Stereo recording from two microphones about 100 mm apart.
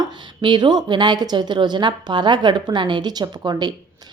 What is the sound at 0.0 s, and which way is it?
A woman's voice, 50° right (ahead or behind).